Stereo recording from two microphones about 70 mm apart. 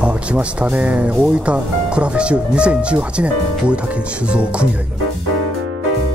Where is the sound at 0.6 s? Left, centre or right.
Centre.